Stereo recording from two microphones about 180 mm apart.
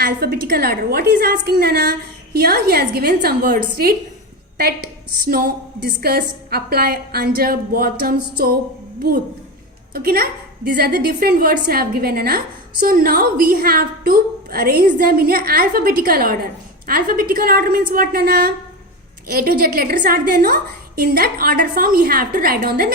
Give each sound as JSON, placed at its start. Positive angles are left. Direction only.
{"t": 0.0, "sound": "a woman's voice", "side_deg": -60}
{"t": 9.9, "sound": "a woman's voice", "side_deg": -55}